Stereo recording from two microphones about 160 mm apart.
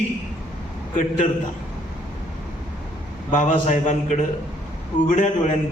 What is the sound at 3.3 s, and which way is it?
A man's voice, 50° left (ahead or behind).